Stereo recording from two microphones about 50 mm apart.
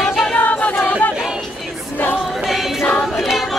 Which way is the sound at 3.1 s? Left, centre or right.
Centre.